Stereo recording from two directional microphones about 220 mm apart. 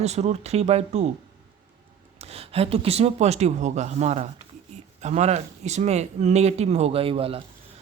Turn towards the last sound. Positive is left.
turn(degrees=-25)  # may be behind; listen again after turning